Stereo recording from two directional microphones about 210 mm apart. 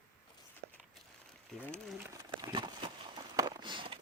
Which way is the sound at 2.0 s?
20° right (ahead or behind).